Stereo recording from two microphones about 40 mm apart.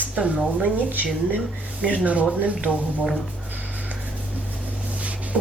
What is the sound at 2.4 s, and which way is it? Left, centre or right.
Speech, right.